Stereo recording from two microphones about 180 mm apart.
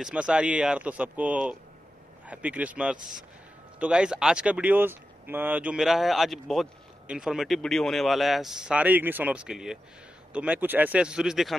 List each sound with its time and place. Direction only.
0.0 s a man's voice: 5° right (ahead or behind)